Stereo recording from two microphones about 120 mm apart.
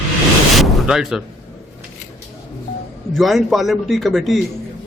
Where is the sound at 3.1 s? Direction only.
Centre (ahead or behind).